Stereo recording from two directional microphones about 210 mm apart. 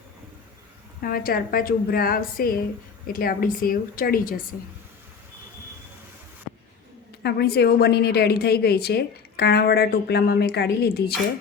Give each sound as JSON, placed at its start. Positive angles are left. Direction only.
{"t": 1.0, "sound": "a woman's voice", "side_deg": 45}
{"t": 7.2, "sound": "a woman's voice", "side_deg": 50}